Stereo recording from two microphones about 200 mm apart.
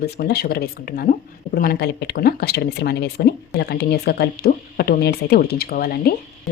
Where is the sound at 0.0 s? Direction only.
50° left (ahead or behind).